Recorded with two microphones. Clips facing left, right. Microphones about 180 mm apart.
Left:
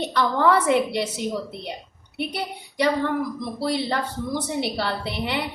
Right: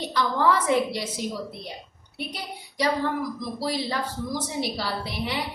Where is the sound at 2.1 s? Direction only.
60° left (ahead or behind).